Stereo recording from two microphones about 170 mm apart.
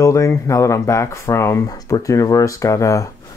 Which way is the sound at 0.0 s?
20° left (ahead or behind).